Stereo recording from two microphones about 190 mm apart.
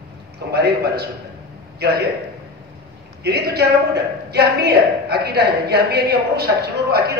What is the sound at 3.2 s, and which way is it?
A woman's voice, 55° right (ahead or behind).